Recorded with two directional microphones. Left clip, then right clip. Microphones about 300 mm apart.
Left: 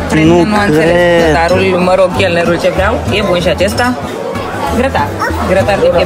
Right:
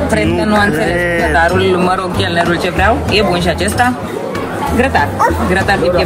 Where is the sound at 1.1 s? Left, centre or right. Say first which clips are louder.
Left 4 dB; centre.